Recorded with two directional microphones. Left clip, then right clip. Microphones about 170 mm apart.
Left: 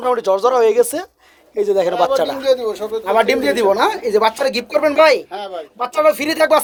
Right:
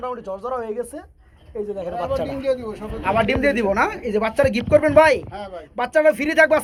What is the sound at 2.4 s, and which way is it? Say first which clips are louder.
Speech: left 7 dB; 55° left (ahead or behind).